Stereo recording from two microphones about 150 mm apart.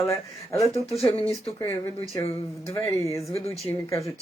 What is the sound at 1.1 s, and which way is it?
Speech, 40° left (ahead or behind).